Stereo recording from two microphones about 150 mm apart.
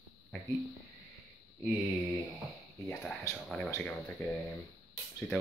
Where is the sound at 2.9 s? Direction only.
5° left (ahead or behind).